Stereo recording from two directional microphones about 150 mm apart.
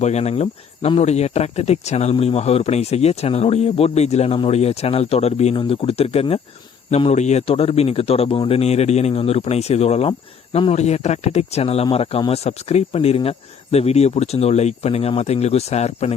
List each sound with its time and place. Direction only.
0.0 s speech: 45° left (ahead or behind)